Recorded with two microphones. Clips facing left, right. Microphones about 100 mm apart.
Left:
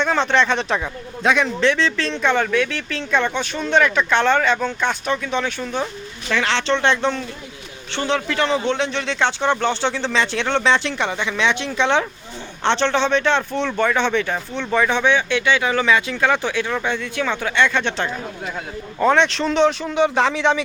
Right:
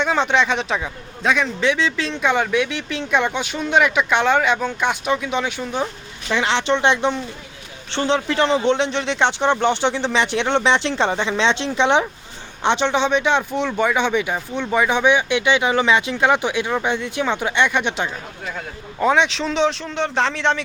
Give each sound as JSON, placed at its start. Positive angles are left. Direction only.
{"t": 0.0, "sound": "a man's voice", "side_deg": -5}